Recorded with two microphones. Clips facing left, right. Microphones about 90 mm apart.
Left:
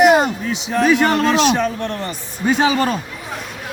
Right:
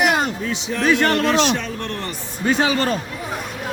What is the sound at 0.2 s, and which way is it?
A man's voice, 10° left (ahead or behind).